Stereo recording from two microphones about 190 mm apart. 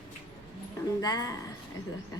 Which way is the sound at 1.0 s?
20° left (ahead or behind).